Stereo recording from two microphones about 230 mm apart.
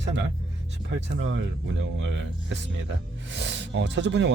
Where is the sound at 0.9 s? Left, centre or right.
Right.